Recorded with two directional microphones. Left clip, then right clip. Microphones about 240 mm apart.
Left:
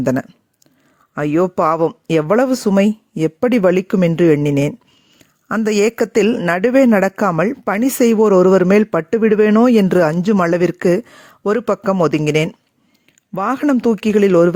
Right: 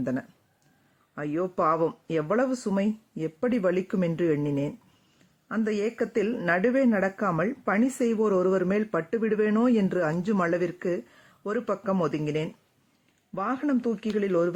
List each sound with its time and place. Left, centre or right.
0.0 s speech: left